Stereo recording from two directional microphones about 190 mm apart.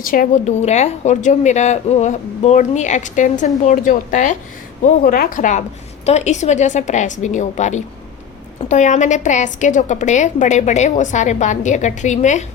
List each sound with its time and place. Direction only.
0.0 s a woman's voice: 45° left (ahead or behind)